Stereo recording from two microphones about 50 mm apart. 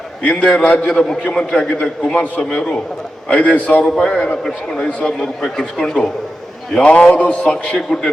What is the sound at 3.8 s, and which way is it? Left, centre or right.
A man's voice, centre.